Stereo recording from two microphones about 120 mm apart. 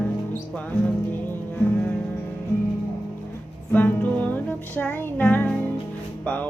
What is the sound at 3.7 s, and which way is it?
Music, 15° left (ahead or behind).